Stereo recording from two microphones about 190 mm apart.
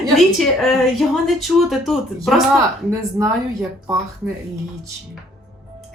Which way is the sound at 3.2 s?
10° right (ahead or behind).